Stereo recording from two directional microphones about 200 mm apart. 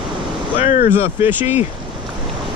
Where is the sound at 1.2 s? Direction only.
10° right (ahead or behind).